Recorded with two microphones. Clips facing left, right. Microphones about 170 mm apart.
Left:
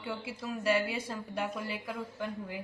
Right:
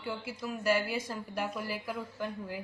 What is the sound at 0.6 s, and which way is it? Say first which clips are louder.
A woman's voice: even; 25° left (ahead or behind).